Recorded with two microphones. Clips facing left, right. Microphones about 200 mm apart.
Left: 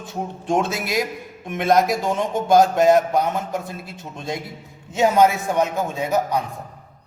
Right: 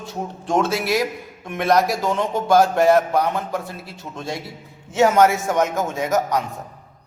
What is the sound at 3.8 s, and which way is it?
Speech, 50° left (ahead or behind).